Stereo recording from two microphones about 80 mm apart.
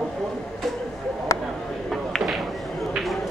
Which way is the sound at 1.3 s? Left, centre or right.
Left.